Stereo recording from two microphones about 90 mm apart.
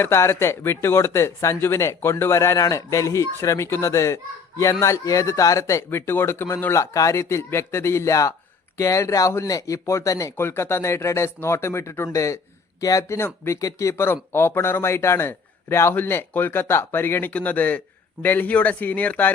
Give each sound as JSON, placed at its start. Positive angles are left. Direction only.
{"t": 0.0, "sound": "speech", "side_deg": 30}